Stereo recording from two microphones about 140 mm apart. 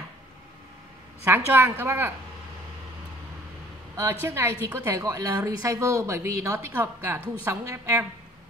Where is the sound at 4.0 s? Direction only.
20° right (ahead or behind).